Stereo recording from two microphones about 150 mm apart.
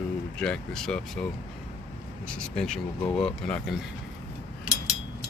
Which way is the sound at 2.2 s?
5° left (ahead or behind).